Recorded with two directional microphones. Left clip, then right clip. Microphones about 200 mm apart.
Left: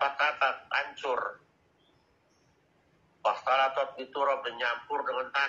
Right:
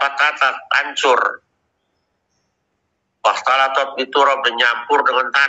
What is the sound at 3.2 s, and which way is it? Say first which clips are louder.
A man's voice: right 11 dB; 45° right (ahead or behind).